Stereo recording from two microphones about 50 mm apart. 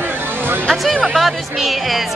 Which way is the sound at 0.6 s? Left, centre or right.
Centre.